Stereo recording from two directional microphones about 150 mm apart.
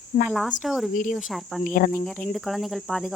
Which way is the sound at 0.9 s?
60° left (ahead or behind).